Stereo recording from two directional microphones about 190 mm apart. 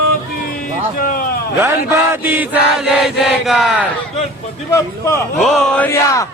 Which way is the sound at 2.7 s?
Centre (ahead or behind).